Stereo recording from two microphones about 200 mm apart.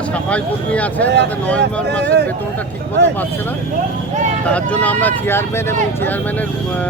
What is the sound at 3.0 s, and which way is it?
Speech, 55° right (ahead or behind).